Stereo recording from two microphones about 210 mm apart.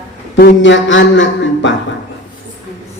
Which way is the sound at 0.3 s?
55° left (ahead or behind).